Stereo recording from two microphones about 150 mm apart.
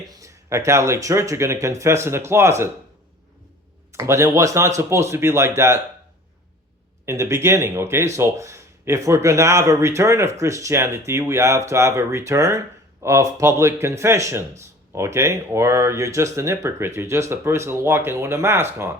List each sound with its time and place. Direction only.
0.2 s speech: 20° right (ahead or behind)
3.9 s speech: 20° right (ahead or behind)
7.0 s speech: 20° right (ahead or behind)